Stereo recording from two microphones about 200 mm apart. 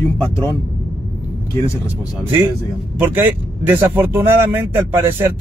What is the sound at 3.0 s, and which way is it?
Speech, 10° right (ahead or behind).